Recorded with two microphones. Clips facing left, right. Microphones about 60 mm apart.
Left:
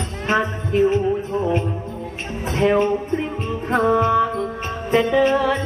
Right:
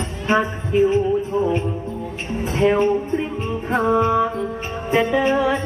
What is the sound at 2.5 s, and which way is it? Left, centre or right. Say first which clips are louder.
Music: even; centre.